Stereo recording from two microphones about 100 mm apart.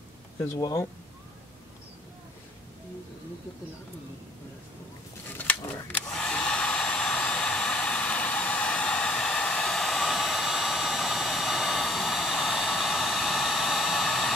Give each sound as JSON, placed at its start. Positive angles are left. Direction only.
{"t": 0.6, "sound": "speech", "side_deg": 40}
{"t": 5.4, "sound": "speech", "side_deg": 15}
{"t": 6.2, "sound": "hair dryer", "side_deg": 10}